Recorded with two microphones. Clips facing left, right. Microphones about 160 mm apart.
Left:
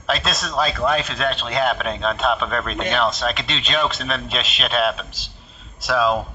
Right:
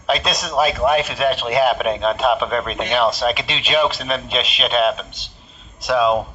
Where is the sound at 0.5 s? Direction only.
15° right (ahead or behind).